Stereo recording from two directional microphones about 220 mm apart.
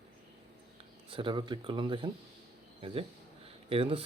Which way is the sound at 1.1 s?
20° right (ahead or behind).